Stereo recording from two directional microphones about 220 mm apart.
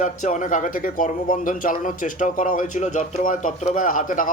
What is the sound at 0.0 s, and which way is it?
Speech, 35° left (ahead or behind).